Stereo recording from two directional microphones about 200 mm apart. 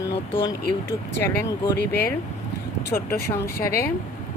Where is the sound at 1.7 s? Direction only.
55° left (ahead or behind).